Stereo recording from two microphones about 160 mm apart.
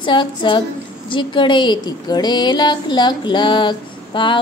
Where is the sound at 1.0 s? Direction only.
30° left (ahead or behind).